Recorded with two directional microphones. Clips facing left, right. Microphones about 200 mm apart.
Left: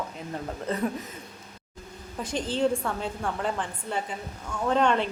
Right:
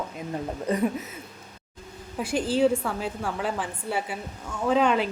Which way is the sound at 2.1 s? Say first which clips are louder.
Right 4 dB; 10° right (ahead or behind).